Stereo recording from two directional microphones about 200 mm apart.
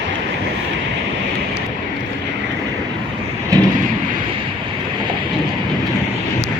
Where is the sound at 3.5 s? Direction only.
15° right (ahead or behind).